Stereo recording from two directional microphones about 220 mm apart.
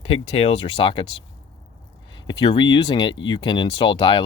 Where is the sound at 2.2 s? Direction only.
20° left (ahead or behind).